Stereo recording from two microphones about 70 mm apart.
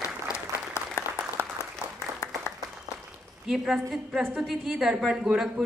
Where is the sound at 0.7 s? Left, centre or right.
Left.